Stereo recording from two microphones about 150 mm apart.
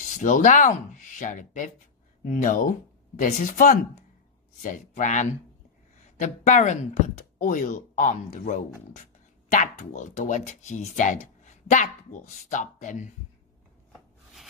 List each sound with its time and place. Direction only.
0.0 s speech: 60° left (ahead or behind)